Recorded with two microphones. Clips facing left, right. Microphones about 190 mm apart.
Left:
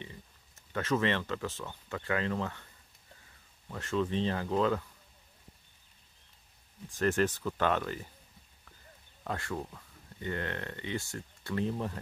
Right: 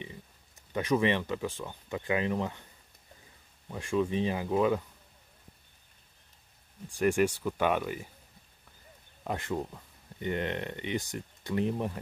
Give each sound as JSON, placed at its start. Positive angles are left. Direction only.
{"t": 0.0, "sound": "speech", "side_deg": -15}
{"t": 6.9, "sound": "speech", "side_deg": -15}
{"t": 9.2, "sound": "speech", "side_deg": -20}